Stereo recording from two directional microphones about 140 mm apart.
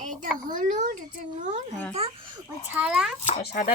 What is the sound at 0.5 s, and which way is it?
Speech, 60° right (ahead or behind).